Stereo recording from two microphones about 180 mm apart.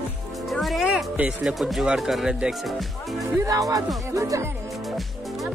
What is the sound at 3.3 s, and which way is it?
Speech, 20° right (ahead or behind).